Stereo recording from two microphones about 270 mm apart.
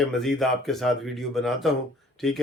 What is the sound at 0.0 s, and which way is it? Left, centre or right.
Speech, centre.